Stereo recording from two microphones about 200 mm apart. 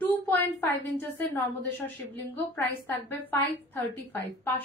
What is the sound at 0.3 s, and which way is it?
A woman's voice, 10° left (ahead or behind).